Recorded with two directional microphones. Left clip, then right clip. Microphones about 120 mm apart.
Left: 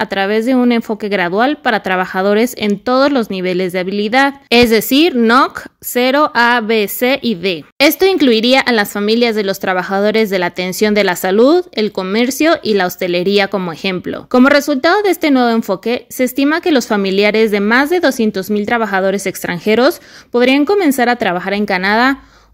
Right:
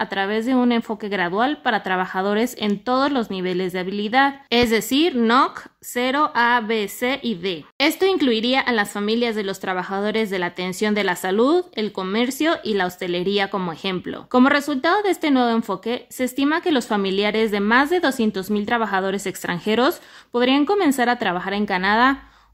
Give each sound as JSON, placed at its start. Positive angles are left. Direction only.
{"t": 0.0, "sound": "speech", "side_deg": 35}